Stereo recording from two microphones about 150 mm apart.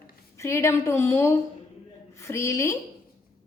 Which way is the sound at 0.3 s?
20° left (ahead or behind).